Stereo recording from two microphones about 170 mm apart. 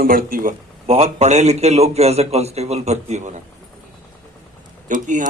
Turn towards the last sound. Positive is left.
turn(degrees=-50)  # may be behind; listen again after turning